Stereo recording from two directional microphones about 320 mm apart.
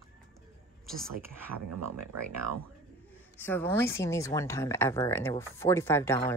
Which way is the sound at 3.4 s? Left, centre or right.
Centre.